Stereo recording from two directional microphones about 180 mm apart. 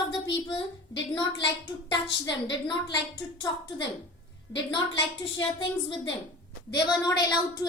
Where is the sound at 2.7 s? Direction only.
25° left (ahead or behind).